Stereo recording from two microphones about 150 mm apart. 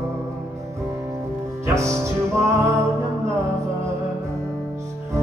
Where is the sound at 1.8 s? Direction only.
20° right (ahead or behind).